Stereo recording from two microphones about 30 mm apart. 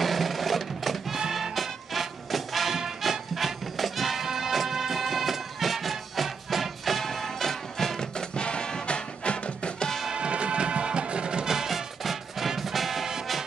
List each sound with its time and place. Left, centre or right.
0.0 s music: centre
8.0 s music: left
10.1 s music: right
11.4 s music: centre